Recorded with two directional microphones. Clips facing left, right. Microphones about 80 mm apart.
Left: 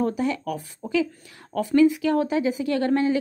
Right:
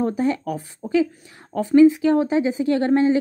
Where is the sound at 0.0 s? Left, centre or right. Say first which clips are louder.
Right 3 dB; right.